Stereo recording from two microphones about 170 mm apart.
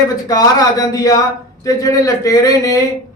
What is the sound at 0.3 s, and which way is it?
Speech, 20° left (ahead or behind).